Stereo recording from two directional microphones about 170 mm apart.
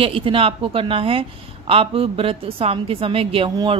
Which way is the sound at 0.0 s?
30° right (ahead or behind).